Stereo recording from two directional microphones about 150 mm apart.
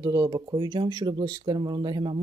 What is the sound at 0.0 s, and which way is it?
Speech, 25° right (ahead or behind).